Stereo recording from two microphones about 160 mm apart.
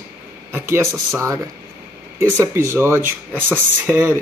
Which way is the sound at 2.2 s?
15° right (ahead or behind).